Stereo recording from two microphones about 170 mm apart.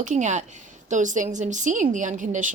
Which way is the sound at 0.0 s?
45° right (ahead or behind).